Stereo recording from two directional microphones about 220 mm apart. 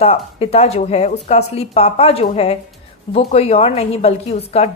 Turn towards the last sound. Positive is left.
turn(degrees=30)  # may be behind; listen again after turning